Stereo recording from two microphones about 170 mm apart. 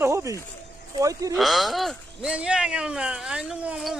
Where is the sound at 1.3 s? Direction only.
Centre (ahead or behind).